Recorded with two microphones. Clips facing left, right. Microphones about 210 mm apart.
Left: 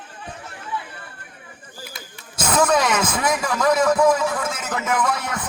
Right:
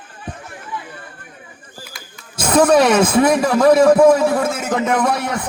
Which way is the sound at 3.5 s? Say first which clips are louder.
Right 7 dB; 25° right (ahead or behind).